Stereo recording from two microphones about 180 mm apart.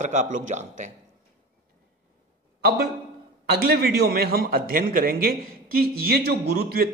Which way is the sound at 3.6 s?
55° right (ahead or behind).